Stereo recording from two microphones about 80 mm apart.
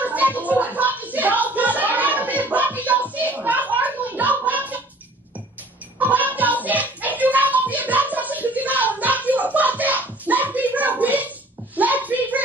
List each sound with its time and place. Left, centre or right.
0.0 s music: right
0.5 s a sound: centre
5.9 s child singing: right
6.6 s music: right